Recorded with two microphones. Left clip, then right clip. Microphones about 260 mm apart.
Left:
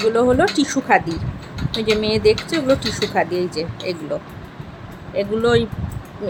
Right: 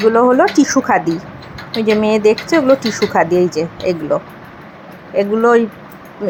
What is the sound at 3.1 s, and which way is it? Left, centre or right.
Speech, centre.